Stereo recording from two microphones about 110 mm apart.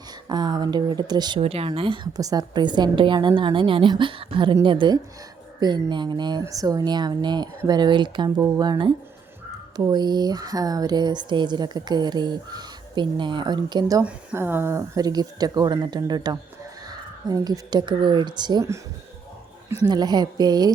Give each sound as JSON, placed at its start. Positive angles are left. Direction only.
{"t": 0.3, "sound": "speech", "side_deg": -40}
{"t": 1.4, "sound": "speech", "side_deg": -60}
{"t": 2.1, "sound": "a woman's voice", "side_deg": -35}
{"t": 6.4, "sound": "a woman's voice", "side_deg": -30}
{"t": 14.3, "sound": "speech", "side_deg": -20}
{"t": 19.9, "sound": "speech", "side_deg": -40}